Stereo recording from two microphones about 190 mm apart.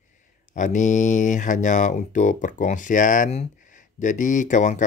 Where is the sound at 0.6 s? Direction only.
40° left (ahead or behind).